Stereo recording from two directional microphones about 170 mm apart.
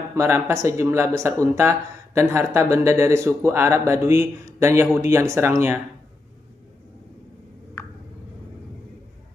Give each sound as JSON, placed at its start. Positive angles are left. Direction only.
{"t": 0.1, "sound": "speech", "side_deg": -15}
{"t": 7.8, "sound": "tick", "side_deg": 15}